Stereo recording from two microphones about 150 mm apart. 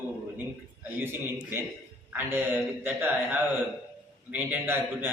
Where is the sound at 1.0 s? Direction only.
15° right (ahead or behind).